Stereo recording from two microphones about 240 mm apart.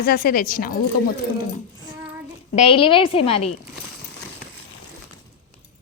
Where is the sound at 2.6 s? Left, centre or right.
Left.